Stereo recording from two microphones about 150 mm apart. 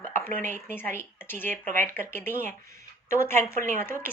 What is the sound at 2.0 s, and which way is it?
A woman's voice, 15° left (ahead or behind).